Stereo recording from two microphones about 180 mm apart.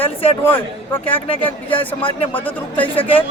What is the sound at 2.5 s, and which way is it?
Speech, 10° left (ahead or behind).